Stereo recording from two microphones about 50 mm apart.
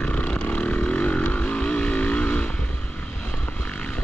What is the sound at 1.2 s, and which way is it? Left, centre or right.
Vehicle, left.